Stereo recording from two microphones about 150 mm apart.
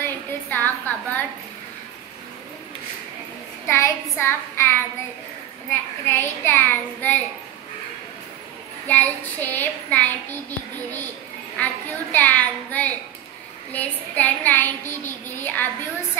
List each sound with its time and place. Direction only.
0.0 s a sound: 15° left (ahead or behind)
3.6 s a child's voice: 20° left (ahead or behind)
4.2 s child singing: 15° left (ahead or behind)
8.8 s child singing: 10° left (ahead or behind)
11.5 s child singing: 10° left (ahead or behind)